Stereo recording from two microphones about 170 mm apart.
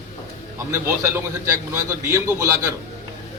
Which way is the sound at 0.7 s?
15° right (ahead or behind).